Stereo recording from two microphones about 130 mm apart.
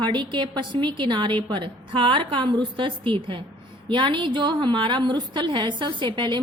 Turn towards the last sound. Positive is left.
turn(degrees=-40)  # may be behind; listen again after turning